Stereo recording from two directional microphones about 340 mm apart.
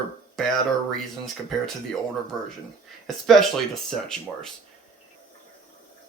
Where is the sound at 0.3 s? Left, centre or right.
Centre.